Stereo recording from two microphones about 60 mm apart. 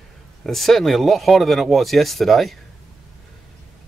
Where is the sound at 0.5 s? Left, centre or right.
Centre.